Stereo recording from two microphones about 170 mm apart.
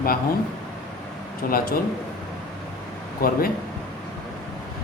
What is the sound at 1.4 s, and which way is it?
Speech, 60° left (ahead or behind).